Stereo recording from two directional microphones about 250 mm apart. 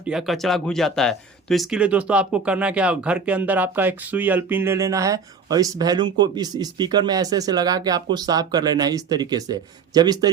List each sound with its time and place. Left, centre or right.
0.0 s speech: centre